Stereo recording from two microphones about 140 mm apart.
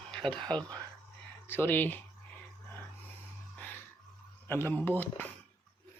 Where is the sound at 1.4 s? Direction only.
15° left (ahead or behind).